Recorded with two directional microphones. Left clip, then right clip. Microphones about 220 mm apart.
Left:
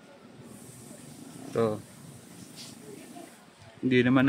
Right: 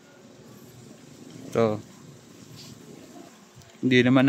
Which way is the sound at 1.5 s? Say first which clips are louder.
Right 4 dB; 30° right (ahead or behind).